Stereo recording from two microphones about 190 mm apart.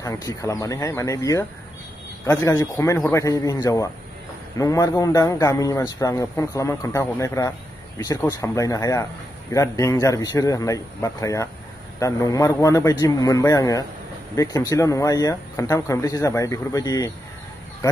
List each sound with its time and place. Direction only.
0.0 s a man's voice: 20° left (ahead or behind)